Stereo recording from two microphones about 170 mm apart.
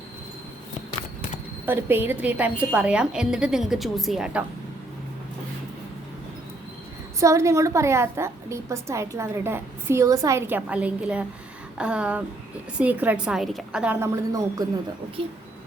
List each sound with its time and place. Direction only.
1.6 s a woman's voice: 10° right (ahead or behind)
7.2 s a woman's voice: 20° right (ahead or behind)